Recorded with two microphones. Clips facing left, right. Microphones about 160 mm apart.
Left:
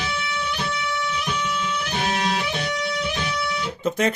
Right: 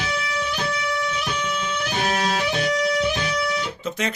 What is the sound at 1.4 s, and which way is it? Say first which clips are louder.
Music: even; 35° right (ahead or behind).